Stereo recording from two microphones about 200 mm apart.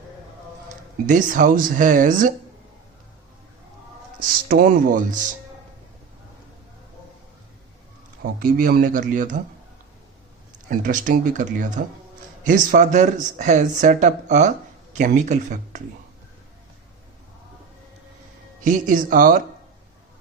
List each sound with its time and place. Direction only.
1.0 s speech: 40° right (ahead or behind)
4.2 s a man's voice: 45° right (ahead or behind)
8.4 s a man's voice: 45° right (ahead or behind)
10.7 s speech: 40° right (ahead or behind)
18.6 s a man's voice: 40° right (ahead or behind)